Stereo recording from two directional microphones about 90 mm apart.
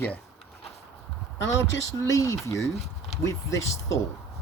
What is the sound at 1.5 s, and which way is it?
Speech, 35° left (ahead or behind).